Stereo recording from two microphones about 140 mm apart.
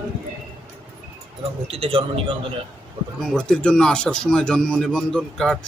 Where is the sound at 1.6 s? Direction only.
45° right (ahead or behind).